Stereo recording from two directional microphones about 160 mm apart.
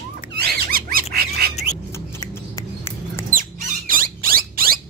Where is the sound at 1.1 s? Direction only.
75° right (ahead or behind).